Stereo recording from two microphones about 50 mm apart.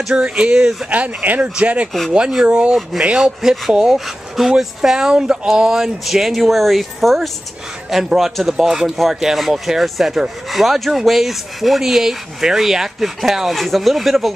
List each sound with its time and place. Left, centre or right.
0.1 s speech: right
0.8 s speech: right; by 14.3 s centre